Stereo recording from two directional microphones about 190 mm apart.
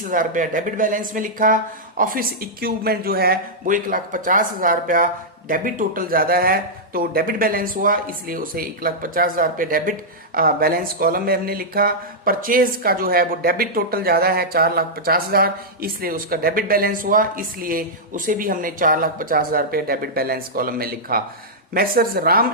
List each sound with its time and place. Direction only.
0.0 s speech: 45° right (ahead or behind)